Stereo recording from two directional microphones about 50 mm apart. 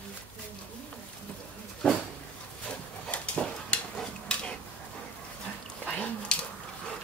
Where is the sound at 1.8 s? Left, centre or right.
Centre.